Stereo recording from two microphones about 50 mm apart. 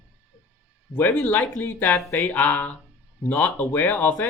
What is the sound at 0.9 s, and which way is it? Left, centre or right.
Speech, left.